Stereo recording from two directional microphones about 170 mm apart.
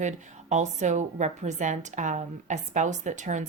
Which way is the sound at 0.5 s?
45° right (ahead or behind).